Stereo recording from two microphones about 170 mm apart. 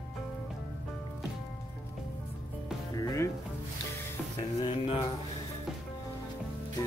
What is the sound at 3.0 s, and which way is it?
Music, 20° left (ahead or behind).